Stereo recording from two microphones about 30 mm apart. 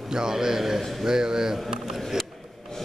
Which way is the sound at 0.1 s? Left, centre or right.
Right.